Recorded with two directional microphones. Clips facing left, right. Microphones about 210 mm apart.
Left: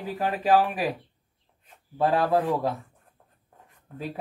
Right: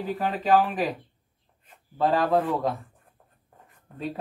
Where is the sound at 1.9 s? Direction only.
10° left (ahead or behind).